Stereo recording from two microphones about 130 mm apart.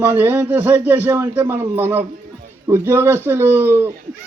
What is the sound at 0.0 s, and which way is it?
Speech, 15° right (ahead or behind).